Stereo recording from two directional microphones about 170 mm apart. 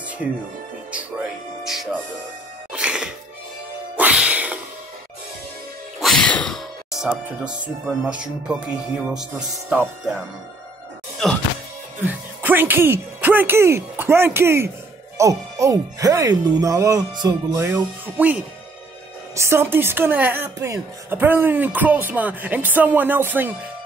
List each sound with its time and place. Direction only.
1.6 s speech: centre (ahead or behind)
2.7 s music: 5° right (ahead or behind)
5.9 s music: centre (ahead or behind)
7.8 s speech: 5° right (ahead or behind)
12.0 s speech: 10° right (ahead or behind)